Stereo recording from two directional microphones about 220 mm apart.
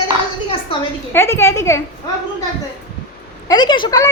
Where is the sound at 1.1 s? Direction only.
10° left (ahead or behind).